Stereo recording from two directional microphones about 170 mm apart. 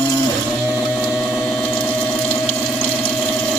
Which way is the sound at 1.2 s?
Centre (ahead or behind).